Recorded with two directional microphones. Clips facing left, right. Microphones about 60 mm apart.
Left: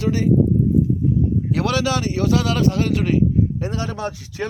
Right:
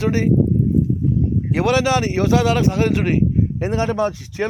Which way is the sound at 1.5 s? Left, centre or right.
Right.